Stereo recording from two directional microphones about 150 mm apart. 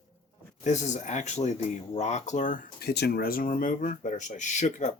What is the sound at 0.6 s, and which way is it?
Speech, 50° left (ahead or behind).